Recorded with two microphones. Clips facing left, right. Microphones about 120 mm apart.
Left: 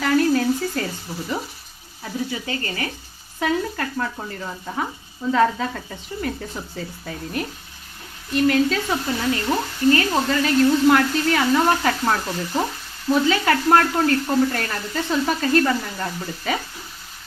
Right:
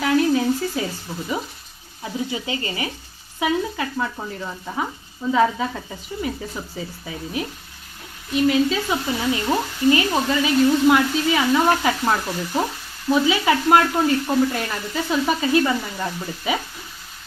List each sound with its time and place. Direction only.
0.0 s a sound: 5° right (ahead or behind)
2.3 s speech: 15° right (ahead or behind)
3.4 s speech: 5° right (ahead or behind)